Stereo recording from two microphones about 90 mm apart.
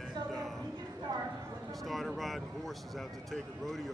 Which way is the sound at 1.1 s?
45° right (ahead or behind).